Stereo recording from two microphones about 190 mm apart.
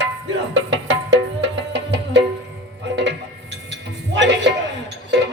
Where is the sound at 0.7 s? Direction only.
70° right (ahead or behind).